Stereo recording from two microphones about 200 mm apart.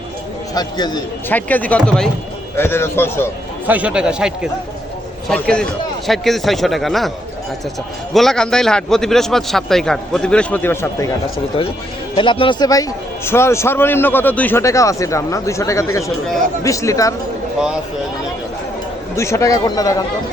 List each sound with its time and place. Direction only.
0.5 s a man's voice: 20° left (ahead or behind)
1.3 s a man's voice: 10° left (ahead or behind)
3.7 s a man's voice: 5° right (ahead or behind)
5.3 s a man's voice: 5° left (ahead or behind)
8.1 s a man's voice: centre (ahead or behind)
12.1 s a man's voice: 25° left (ahead or behind)
19.1 s a man's voice: 15° left (ahead or behind)